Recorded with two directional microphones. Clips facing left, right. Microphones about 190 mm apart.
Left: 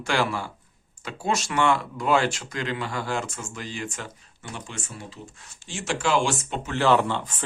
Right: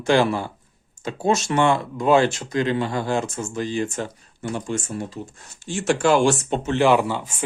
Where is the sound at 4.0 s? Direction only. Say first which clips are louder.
Right 9 dB; 45° right (ahead or behind).